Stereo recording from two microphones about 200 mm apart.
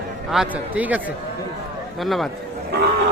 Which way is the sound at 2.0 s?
Centre (ahead or behind).